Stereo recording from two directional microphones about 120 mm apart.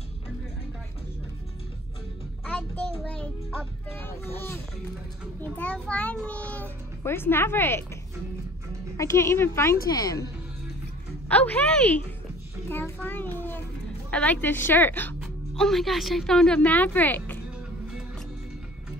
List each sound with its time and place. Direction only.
2.4 s child singing: 10° left (ahead or behind)
3.9 s speech: 20° left (ahead or behind)
5.4 s a child's voice: 10° left (ahead or behind); by 10.2 s 30° left (ahead or behind)
11.2 s a child's voice: 10° left (ahead or behind)
12.6 s a sound: 20° left (ahead or behind)
14.1 s a child's voice: 10° left (ahead or behind)
15.5 s speech: 5° left (ahead or behind)